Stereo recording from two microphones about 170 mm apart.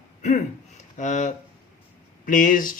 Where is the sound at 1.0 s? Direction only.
45° left (ahead or behind).